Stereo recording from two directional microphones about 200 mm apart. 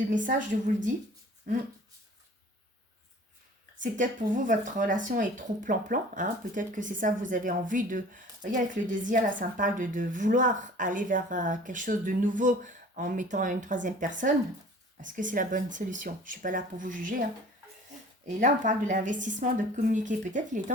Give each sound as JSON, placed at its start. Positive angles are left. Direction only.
{"t": 0.1, "sound": "a woman's voice", "side_deg": -40}
{"t": 3.8, "sound": "a woman's voice", "side_deg": -40}
{"t": 18.3, "sound": "a woman's voice", "side_deg": -40}